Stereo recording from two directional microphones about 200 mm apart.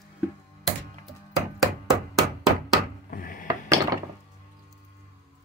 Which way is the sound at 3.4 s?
15° right (ahead or behind).